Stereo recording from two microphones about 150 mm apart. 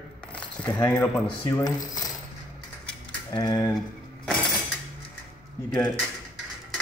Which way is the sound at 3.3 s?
25° left (ahead or behind).